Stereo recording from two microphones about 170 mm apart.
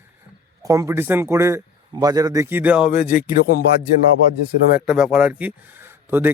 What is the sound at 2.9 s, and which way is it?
Speech, 60° left (ahead or behind).